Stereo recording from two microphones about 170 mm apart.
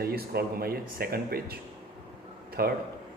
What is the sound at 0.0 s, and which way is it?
A man's voice, 65° right (ahead or behind).